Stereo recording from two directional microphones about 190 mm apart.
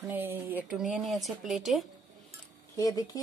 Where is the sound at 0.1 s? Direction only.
10° right (ahead or behind).